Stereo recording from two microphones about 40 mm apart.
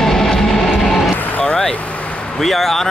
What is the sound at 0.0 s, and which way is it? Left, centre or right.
Music, centre.